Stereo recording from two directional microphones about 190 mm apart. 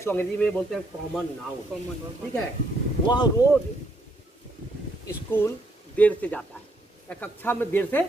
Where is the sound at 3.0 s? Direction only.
25° left (ahead or behind).